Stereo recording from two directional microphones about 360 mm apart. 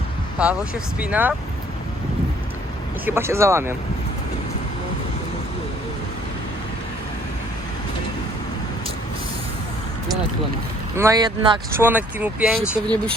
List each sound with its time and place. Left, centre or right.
0.3 s speech: centre
3.1 s speech: centre
10.9 s speech: centre